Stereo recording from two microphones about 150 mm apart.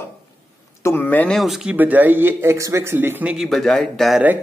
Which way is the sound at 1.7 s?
10° right (ahead or behind).